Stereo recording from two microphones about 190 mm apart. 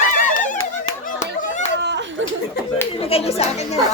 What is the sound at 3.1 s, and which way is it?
Children playing, 30° left (ahead or behind).